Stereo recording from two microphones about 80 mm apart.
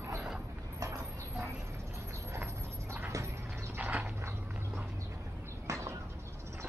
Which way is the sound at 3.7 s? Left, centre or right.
Right.